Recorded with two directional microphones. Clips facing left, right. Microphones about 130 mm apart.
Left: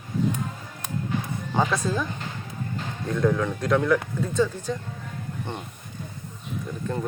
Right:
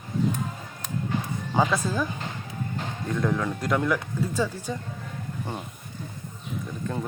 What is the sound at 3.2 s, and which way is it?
Speech, centre (ahead or behind).